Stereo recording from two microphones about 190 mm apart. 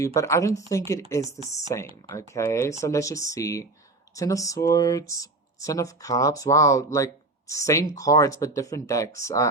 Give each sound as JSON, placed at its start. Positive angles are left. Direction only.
{"t": 0.0, "sound": "speech", "side_deg": 15}
{"t": 1.7, "sound": "speech", "side_deg": 15}